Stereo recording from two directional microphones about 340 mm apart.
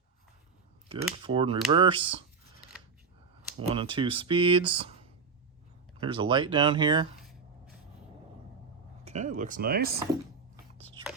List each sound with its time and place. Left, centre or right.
1.2 s speech: centre
3.6 s speech: centre
6.0 s speech: centre
9.0 s speech: right